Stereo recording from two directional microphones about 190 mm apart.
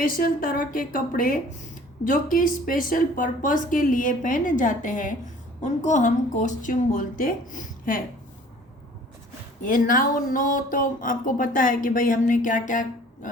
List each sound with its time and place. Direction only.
0.0 s speech: 50° left (ahead or behind)
9.6 s speech: 45° left (ahead or behind)